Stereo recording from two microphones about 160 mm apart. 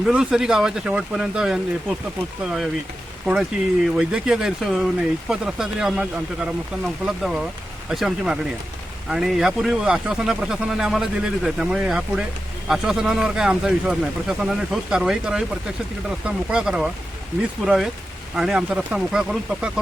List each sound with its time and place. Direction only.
0.0 s speech: 5° right (ahead or behind)
18.3 s speech: 5° right (ahead or behind)